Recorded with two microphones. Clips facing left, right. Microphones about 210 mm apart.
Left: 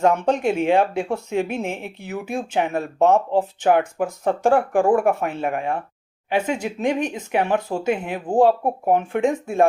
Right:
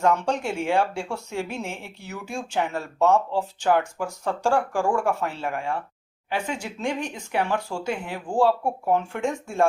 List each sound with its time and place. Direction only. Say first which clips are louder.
0.3 s speech: left 6 dB; 20° left (ahead or behind)